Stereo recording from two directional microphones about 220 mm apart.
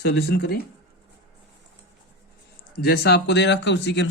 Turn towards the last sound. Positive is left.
turn(degrees=50)  # may be behind; listen again after turning